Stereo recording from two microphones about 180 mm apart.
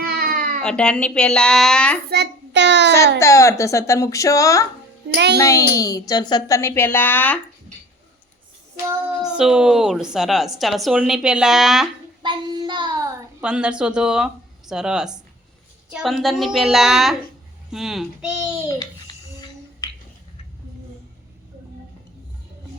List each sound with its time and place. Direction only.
0.0 s baby cry: 60° right (ahead or behind)
0.6 s speech: 5° left (ahead or behind)
2.0 s child singing: 65° right (ahead or behind)
3.2 s a woman's voice: 15° left (ahead or behind)
5.1 s a child's voice: 65° right (ahead or behind)
5.4 s a woman's voice: 20° left (ahead or behind)
8.9 s speech: 5° right (ahead or behind)
12.2 s child singing: 25° right (ahead or behind)
13.4 s speech: 5° right (ahead or behind)